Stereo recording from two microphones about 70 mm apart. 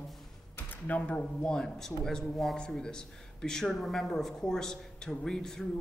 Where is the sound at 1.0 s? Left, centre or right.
Centre.